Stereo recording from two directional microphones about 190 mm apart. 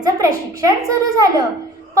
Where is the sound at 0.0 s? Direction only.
20° right (ahead or behind).